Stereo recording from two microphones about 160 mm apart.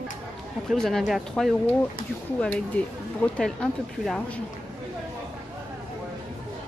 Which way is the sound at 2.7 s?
10° left (ahead or behind).